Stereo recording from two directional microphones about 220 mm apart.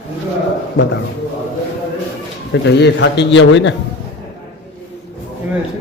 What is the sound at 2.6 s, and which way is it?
A man's voice, 50° left (ahead or behind).